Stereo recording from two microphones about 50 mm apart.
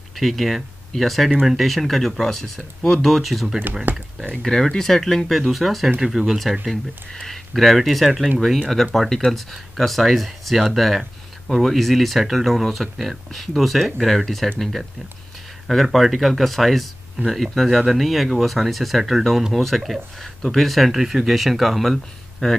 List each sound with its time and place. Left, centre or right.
0.1 s speech: centre
3.9 s speech: right
4.5 s speech: centre
6.7 s speech: centre